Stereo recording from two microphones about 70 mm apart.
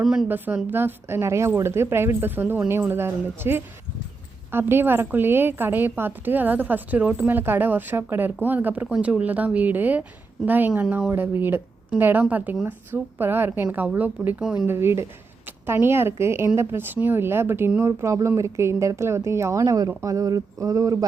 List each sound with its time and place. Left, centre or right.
0.0 s speech: centre
0.3 s a woman's voice: right
10.8 s speech: centre
11.1 s a woman's voice: right
14.4 s speech: centre
14.7 s a woman's voice: right
17.8 s speech: right